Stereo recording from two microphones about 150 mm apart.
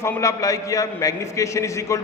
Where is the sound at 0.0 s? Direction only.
20° left (ahead or behind).